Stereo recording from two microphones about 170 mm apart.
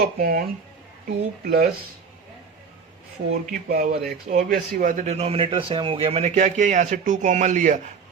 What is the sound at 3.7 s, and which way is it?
A man's voice, 65° right (ahead or behind).